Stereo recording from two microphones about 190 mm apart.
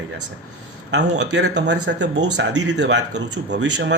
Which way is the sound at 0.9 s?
65° right (ahead or behind).